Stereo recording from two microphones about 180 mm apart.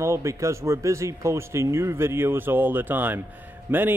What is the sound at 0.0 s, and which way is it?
Speech, 15° right (ahead or behind).